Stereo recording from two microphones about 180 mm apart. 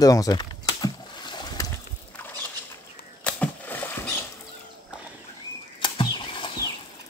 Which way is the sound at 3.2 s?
5° left (ahead or behind).